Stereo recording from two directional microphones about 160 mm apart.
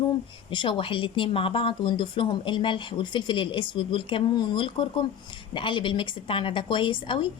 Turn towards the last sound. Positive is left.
turn(degrees=30)  # may be behind; listen again after turning